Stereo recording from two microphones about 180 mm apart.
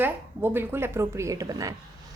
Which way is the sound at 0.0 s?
10° right (ahead or behind).